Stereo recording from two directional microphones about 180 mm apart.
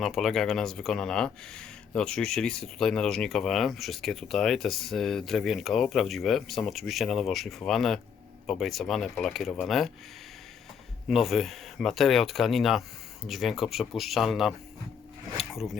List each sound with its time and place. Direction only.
0.0 s speech: centre (ahead or behind)
11.1 s speech: centre (ahead or behind)